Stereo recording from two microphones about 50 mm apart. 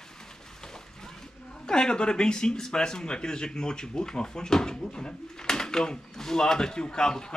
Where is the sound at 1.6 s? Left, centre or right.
Centre.